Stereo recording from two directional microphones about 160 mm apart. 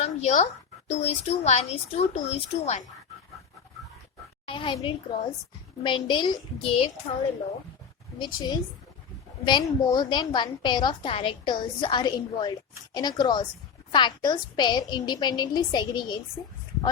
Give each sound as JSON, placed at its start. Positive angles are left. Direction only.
{"t": 0.0, "sound": "a sound", "side_deg": 45}
{"t": 0.9, "sound": "speech", "side_deg": 40}
{"t": 4.4, "sound": "a woman's voice", "side_deg": 30}
{"t": 8.2, "sound": "a woman's voice", "side_deg": 25}